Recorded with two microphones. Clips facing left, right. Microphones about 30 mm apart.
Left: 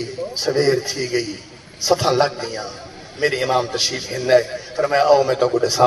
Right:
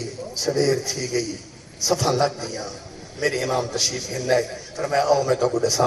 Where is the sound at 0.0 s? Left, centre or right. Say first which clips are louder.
Left 4 dB; left.